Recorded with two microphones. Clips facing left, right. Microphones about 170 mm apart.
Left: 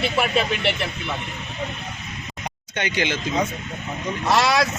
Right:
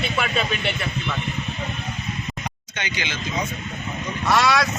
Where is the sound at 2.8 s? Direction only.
55° left (ahead or behind).